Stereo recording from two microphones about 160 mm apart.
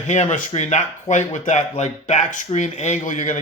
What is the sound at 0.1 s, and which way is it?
A man's voice, 50° left (ahead or behind).